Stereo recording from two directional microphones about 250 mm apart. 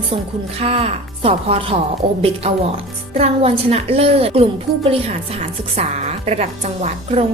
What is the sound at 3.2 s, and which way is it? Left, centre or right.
A woman's voice, right.